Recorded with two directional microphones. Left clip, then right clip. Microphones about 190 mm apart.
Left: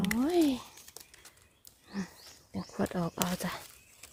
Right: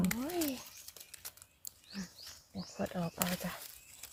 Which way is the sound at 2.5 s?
60° left (ahead or behind).